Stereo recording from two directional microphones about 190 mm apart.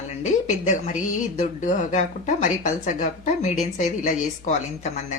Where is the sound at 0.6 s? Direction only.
40° left (ahead or behind).